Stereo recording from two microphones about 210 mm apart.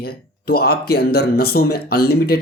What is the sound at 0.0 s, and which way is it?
Speech, 45° left (ahead or behind).